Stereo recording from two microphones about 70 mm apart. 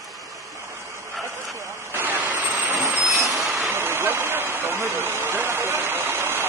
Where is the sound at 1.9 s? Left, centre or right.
Right.